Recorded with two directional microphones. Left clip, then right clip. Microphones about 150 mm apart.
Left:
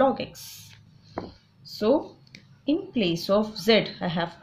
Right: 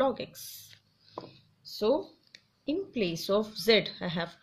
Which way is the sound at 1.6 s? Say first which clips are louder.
Left 4 dB; 30° right (ahead or behind).